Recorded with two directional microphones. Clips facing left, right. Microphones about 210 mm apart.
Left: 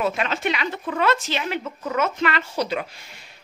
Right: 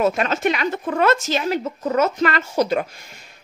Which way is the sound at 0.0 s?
45° right (ahead or behind).